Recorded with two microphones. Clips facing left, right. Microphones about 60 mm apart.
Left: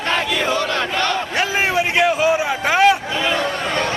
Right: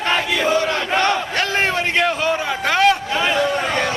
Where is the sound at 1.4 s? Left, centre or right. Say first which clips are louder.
Left 4 dB; centre.